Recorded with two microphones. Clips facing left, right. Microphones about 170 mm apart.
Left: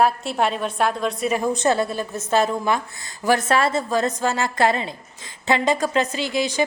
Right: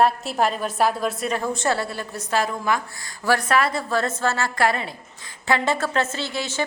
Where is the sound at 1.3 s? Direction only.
15° left (ahead or behind).